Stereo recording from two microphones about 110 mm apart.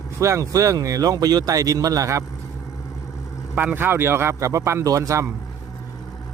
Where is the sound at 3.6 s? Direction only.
20° right (ahead or behind).